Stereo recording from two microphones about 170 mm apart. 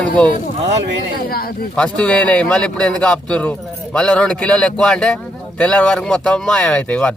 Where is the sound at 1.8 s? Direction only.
5° left (ahead or behind).